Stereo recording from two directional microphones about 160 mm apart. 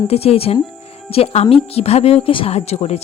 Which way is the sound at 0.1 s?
40° left (ahead or behind).